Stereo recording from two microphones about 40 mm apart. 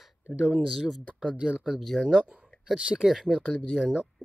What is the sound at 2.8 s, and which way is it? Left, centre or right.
Speech, right.